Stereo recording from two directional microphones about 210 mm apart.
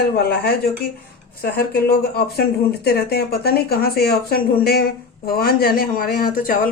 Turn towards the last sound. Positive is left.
turn(degrees=40)  # may be behind; listen again after turning